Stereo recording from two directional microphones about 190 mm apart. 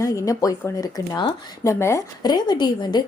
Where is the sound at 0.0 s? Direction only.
15° left (ahead or behind).